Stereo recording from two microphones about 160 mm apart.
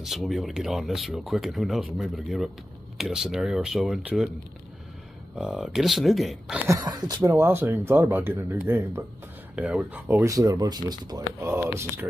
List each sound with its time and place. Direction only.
0.0 s speech: centre (ahead or behind)
5.4 s speech: 5° right (ahead or behind)
6.7 s speech: 25° right (ahead or behind)